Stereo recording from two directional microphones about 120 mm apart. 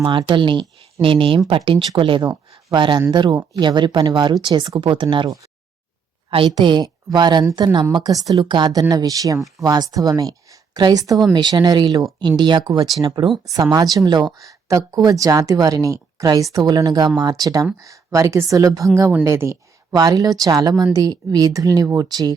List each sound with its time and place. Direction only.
0.0 s speech: 40° right (ahead or behind)
2.3 s a sound: 25° right (ahead or behind)
2.7 s speech: 40° right (ahead or behind)
6.5 s speech: 40° right (ahead or behind)